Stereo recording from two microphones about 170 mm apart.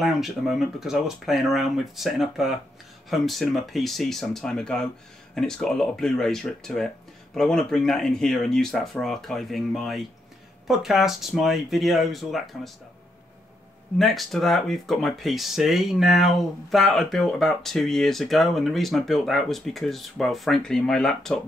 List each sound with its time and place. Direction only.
0.0 s speech: centre (ahead or behind)
13.9 s speech: centre (ahead or behind)